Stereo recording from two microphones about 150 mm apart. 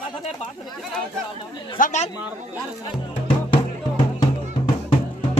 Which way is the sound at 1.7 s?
60° left (ahead or behind).